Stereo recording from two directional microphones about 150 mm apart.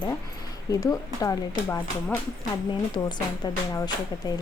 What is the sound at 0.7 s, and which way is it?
Speech, 20° left (ahead or behind).